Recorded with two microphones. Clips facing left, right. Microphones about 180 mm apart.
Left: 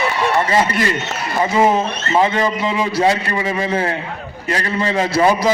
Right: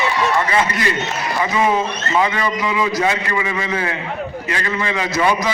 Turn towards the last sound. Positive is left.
turn(degrees=30)  # may be behind; listen again after turning